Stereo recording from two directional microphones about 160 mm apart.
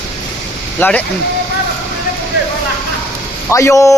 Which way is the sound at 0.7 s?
10° left (ahead or behind).